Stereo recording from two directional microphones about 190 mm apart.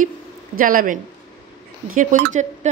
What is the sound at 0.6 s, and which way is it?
Speech, 45° right (ahead or behind).